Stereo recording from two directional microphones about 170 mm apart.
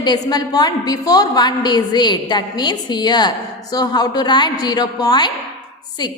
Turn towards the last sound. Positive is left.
turn(degrees=25)  # may be behind; listen again after turning